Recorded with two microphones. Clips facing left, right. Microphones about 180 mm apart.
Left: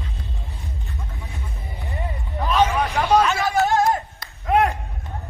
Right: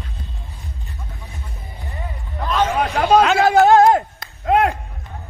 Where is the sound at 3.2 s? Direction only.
65° right (ahead or behind).